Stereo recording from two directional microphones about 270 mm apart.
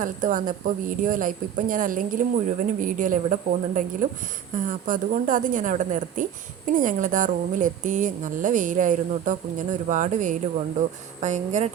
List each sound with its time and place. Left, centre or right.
0.0 s a woman's voice: right
4.5 s a woman's voice: right